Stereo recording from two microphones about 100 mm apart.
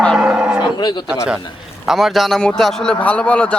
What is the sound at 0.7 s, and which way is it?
Speech, 50° left (ahead or behind).